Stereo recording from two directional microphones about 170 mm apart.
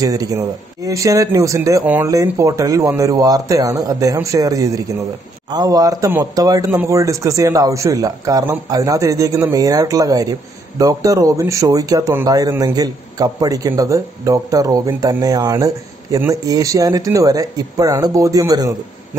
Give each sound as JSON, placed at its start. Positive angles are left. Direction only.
{"t": 0.0, "sound": "speech", "side_deg": -20}